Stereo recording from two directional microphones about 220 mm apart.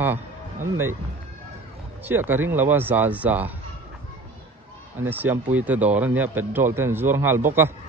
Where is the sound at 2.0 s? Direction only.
10° right (ahead or behind).